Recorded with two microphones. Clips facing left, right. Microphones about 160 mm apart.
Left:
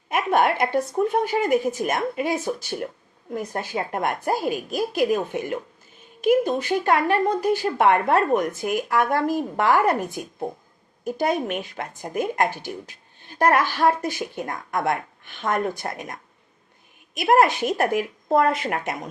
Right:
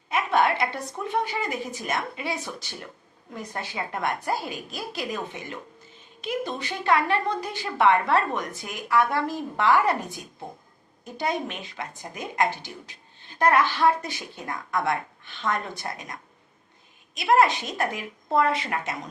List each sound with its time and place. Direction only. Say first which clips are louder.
0.1 s speech: left 3 dB; 50° left (ahead or behind)
17.2 s speech: left 3 dB; 50° left (ahead or behind)